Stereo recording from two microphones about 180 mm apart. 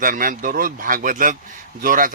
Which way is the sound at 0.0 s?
50° right (ahead or behind).